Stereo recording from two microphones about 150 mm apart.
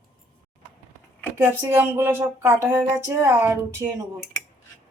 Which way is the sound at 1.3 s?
15° right (ahead or behind).